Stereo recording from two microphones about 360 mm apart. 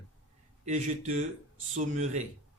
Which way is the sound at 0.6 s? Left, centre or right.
Right.